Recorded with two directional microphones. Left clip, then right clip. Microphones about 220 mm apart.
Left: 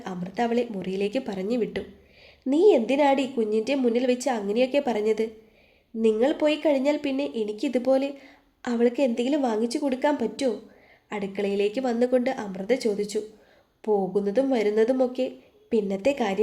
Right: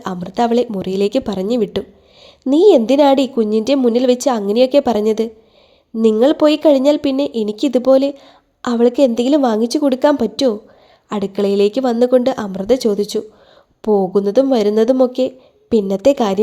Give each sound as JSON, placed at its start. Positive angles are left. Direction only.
{"t": 0.0, "sound": "speech", "side_deg": -35}